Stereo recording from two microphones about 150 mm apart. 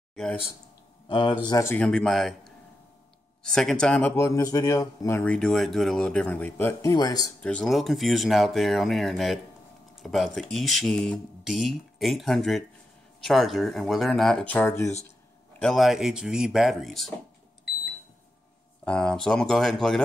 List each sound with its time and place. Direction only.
0.1 s speech: 5° left (ahead or behind)
1.0 s speech: 35° left (ahead or behind)
1.6 s speech: 10° left (ahead or behind)
3.4 s speech: 5° left (ahead or behind); by 7.2 s 25° left (ahead or behind)
7.4 s speech: 5° left (ahead or behind)
15.6 s speech: centre (ahead or behind)
18.9 s speech: 5° left (ahead or behind)